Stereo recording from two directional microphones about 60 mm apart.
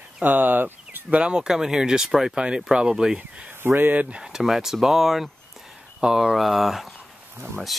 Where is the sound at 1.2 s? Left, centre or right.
Centre.